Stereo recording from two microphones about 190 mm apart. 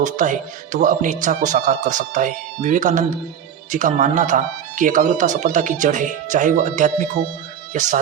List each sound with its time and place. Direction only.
0.0 s speech: 40° right (ahead or behind)